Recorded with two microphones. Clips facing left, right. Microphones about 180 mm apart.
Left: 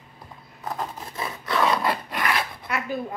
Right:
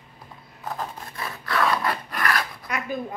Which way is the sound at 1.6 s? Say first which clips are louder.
Left 1 dB; 25° left (ahead or behind).